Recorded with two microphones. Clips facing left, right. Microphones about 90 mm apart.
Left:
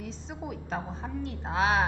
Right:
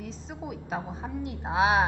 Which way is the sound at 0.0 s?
Centre (ahead or behind).